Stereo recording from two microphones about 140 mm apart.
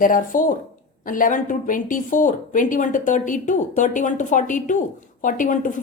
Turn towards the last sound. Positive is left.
turn(degrees=70)  # may be behind; listen again after turning